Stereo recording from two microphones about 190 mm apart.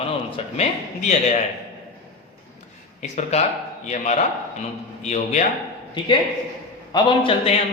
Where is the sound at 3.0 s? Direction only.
35° left (ahead or behind).